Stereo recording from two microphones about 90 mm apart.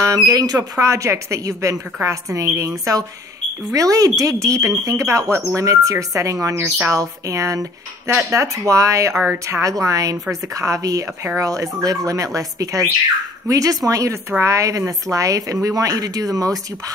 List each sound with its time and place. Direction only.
0.0 s speech: 40° right (ahead or behind)
9.2 s a woman's voice: 20° right (ahead or behind)
9.6 s speech: 35° right (ahead or behind)